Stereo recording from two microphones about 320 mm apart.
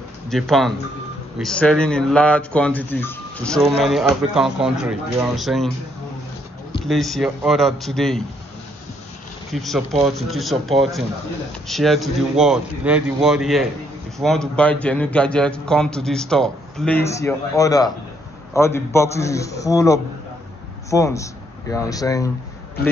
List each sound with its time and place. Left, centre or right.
0.3 s a man's voice: centre
6.9 s a man's voice: centre
9.5 s a man's voice: centre